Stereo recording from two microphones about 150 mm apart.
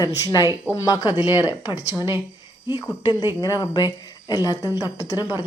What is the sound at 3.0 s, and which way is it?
Speech, 30° left (ahead or behind).